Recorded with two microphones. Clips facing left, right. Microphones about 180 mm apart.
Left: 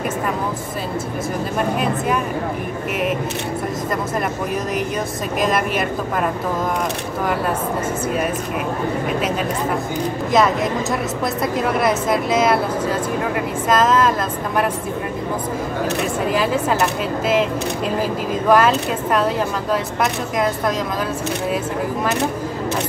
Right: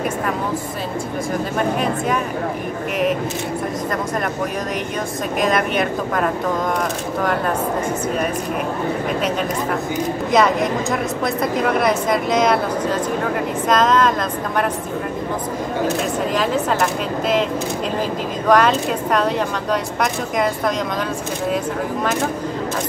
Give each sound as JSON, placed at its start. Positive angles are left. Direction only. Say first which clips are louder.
{"t": 1.6, "sound": "speech", "louder": "even", "side_deg": 0}
{"t": 5.4, "sound": "speech", "louder": "right 1 dB", "side_deg": 5}
{"t": 10.3, "sound": "speech", "louder": "right 1 dB", "side_deg": 0}
{"t": 13.7, "sound": "speech", "louder": "even", "side_deg": 5}
{"t": 16.3, "sound": "speech", "louder": "even", "side_deg": 5}
{"t": 18.5, "sound": "speech", "louder": "even", "side_deg": 5}